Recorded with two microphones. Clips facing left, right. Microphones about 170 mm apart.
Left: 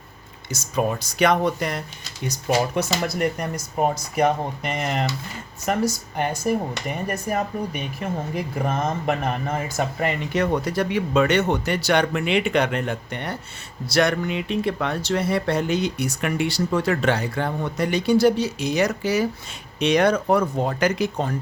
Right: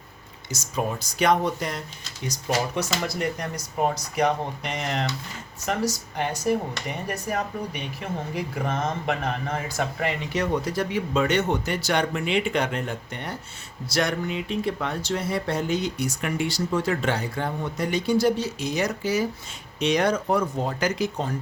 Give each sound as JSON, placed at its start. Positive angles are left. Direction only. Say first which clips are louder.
{"t": 0.5, "sound": "speech", "louder": "left 4 dB", "side_deg": 65}
{"t": 9.0, "sound": "speech", "louder": "left 3 dB", "side_deg": 50}